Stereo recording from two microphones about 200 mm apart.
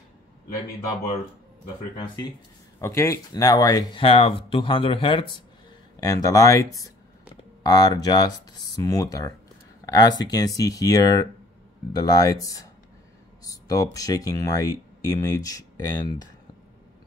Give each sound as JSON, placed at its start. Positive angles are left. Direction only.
{"t": 2.8, "sound": "speech", "side_deg": 15}